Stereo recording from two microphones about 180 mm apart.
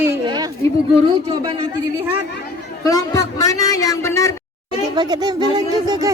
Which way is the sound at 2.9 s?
20° left (ahead or behind).